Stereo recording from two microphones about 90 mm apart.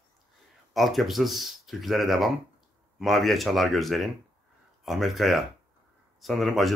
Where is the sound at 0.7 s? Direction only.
Centre (ahead or behind).